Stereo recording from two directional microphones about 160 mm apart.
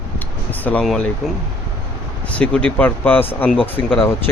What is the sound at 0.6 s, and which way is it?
Speech, 5° left (ahead or behind).